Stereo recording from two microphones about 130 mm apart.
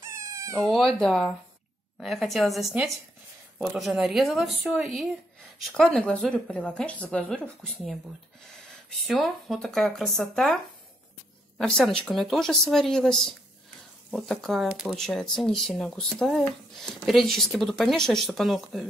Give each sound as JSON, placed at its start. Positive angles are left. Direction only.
{"t": 0.0, "sound": "cat", "side_deg": -20}
{"t": 0.7, "sound": "speech", "side_deg": 5}
{"t": 9.0, "sound": "speech", "side_deg": 0}